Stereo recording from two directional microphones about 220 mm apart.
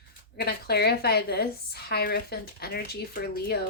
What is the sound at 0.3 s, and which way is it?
A woman's voice, 45° left (ahead or behind).